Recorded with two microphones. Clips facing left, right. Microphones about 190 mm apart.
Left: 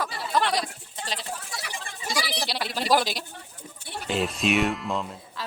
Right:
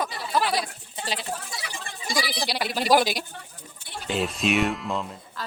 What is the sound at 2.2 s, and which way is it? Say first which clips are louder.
A man's voice: right 2 dB; centre (ahead or behind).